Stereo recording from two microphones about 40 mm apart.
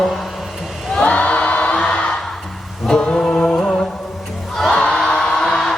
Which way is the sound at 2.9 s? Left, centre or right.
Left.